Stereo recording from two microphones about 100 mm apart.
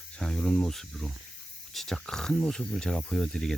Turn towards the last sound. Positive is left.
turn(degrees=5)  # may be behind; listen again after turning